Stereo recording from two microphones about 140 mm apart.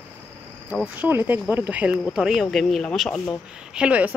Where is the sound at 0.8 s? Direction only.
15° right (ahead or behind); by 3.2 s 5° left (ahead or behind).